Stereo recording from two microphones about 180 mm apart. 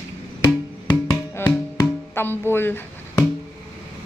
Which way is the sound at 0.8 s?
20° left (ahead or behind).